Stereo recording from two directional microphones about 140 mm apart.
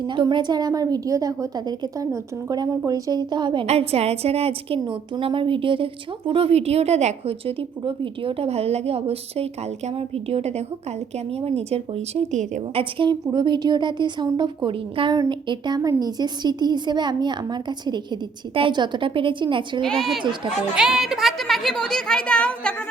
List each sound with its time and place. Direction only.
0.0 s a woman's voice: 35° right (ahead or behind)
3.7 s a woman's voice: 50° right (ahead or behind)
12.7 s a woman's voice: 35° right (ahead or behind)
19.8 s speech: centre (ahead or behind)